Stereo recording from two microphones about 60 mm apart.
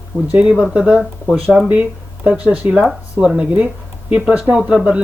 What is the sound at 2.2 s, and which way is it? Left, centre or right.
Speech, right.